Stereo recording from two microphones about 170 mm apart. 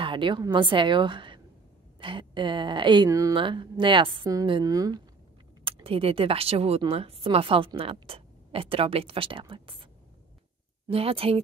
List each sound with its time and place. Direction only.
0.0 s a woman's voice: 30° right (ahead or behind)
5.6 s speech: 35° right (ahead or behind)
10.9 s speech: 35° right (ahead or behind)